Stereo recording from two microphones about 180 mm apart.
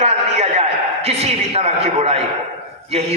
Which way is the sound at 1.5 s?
35° right (ahead or behind).